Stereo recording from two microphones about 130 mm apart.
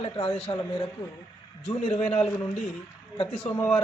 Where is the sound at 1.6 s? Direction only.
50° left (ahead or behind).